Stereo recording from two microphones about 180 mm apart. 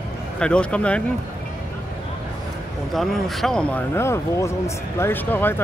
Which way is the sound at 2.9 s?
Centre (ahead or behind).